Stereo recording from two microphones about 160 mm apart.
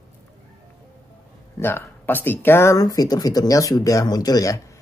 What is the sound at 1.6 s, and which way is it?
Speech, 15° left (ahead or behind).